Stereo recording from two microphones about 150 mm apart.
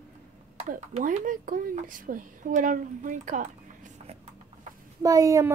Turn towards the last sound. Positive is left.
turn(degrees=-20)  # may be behind; listen again after turning